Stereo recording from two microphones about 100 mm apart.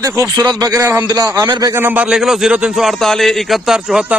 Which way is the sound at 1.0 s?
40° right (ahead or behind).